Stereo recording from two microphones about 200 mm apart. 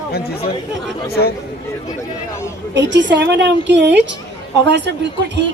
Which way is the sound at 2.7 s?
60° right (ahead or behind).